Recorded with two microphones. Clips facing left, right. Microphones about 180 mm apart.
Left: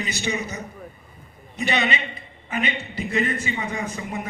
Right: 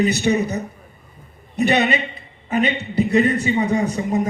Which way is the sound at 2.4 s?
40° right (ahead or behind).